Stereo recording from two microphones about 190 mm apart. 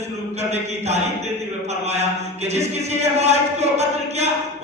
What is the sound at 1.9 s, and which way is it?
Speech, 35° right (ahead or behind).